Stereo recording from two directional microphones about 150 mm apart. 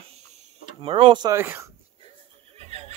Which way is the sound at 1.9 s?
40° right (ahead or behind).